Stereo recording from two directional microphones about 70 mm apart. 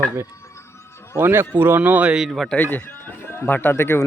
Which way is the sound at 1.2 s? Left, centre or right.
Right.